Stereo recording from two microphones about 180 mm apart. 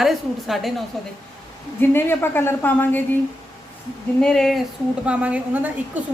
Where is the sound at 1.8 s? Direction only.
10° left (ahead or behind).